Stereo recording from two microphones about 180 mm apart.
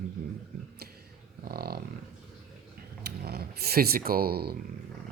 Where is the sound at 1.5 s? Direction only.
60° right (ahead or behind).